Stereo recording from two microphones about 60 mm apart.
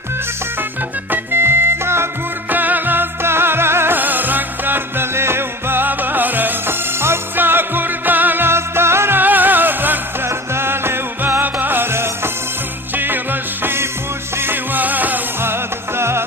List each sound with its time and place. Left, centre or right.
1.1 s music: right
2.5 s music: right
10.2 s music: right
12.9 s music: right